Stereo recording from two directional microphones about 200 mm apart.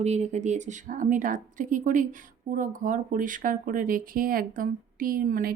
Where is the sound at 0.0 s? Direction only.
35° right (ahead or behind).